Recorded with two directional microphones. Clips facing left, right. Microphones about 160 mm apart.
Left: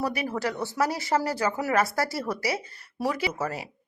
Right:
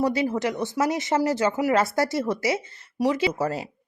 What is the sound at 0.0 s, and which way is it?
Speech, 25° right (ahead or behind).